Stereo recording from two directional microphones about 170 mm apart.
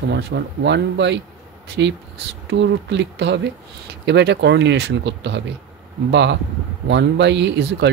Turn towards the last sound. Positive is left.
turn(degrees=-90)